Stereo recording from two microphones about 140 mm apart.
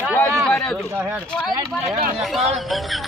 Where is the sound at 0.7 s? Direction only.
15° right (ahead or behind).